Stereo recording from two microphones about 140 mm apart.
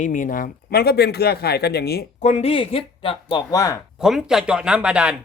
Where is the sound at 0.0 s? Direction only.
70° left (ahead or behind); by 2.3 s 90° left.